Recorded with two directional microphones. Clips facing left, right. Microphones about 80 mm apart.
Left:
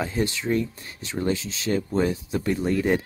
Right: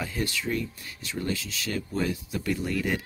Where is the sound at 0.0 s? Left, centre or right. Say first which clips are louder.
Left 5 dB; left.